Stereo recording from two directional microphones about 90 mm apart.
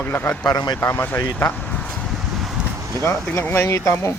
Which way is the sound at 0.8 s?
25° left (ahead or behind).